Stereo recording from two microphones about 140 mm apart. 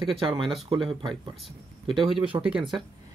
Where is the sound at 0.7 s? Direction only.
40° right (ahead or behind).